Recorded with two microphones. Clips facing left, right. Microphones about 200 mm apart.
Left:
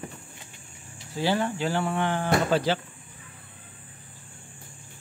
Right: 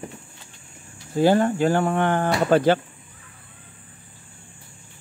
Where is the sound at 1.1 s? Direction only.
50° right (ahead or behind).